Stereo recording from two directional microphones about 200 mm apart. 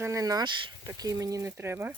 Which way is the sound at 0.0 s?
15° right (ahead or behind).